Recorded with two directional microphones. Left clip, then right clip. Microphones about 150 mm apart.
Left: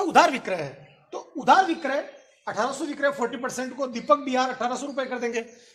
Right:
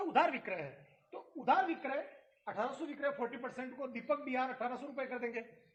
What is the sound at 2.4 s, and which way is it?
Speech, 10° left (ahead or behind).